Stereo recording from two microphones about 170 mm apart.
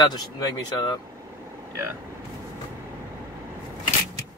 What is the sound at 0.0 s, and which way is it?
Speech, 25° left (ahead or behind).